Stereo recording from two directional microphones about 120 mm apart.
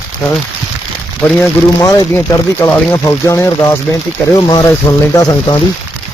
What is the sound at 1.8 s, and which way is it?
Speech, 30° left (ahead or behind).